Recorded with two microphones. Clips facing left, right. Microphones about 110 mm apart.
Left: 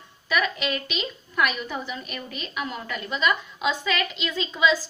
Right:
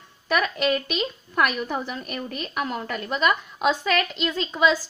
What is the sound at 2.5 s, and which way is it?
A woman's voice, 50° right (ahead or behind).